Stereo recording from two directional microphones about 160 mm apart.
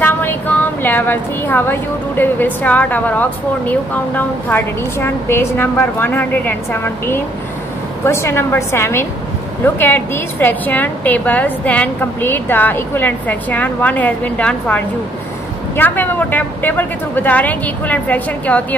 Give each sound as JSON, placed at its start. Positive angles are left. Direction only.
{"t": 0.0, "sound": "a woman's voice", "side_deg": 10}